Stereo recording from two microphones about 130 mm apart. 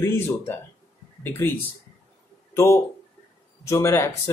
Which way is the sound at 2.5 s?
20° left (ahead or behind).